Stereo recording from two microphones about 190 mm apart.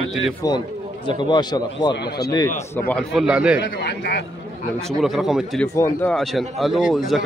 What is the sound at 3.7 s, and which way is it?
Speech, 60° left (ahead or behind).